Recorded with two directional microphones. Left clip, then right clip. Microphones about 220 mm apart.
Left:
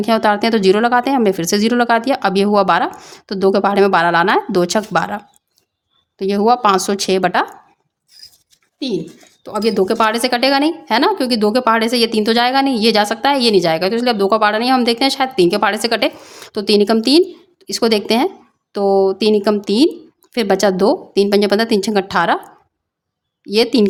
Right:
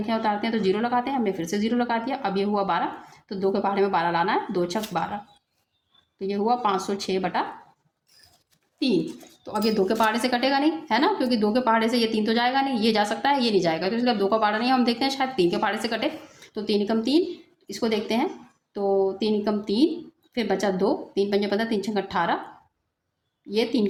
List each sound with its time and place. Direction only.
0.0 s speech: 45° left (ahead or behind)
8.8 s a woman's voice: 20° left (ahead or behind); by 22.4 s 40° left (ahead or behind)
23.5 s speech: 40° left (ahead or behind)